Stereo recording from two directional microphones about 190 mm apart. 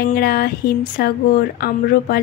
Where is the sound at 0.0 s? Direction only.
55° left (ahead or behind).